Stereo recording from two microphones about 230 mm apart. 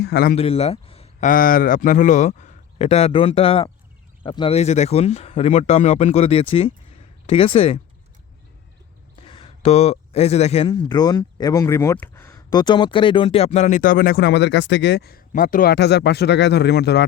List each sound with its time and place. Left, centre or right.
0.0 s speech: left
0.3 s speech: left
9.2 s speech: left